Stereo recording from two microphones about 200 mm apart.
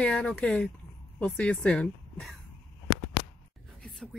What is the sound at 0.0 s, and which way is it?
Speech, 5° left (ahead or behind).